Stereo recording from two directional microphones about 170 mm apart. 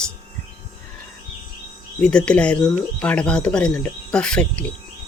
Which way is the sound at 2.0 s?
5° left (ahead or behind).